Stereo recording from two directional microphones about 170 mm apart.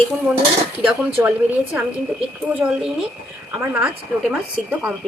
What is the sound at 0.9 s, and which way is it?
Speech, 10° right (ahead or behind).